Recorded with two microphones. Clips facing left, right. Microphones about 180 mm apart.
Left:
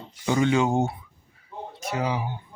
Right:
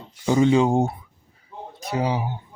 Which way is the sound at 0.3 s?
30° right (ahead or behind).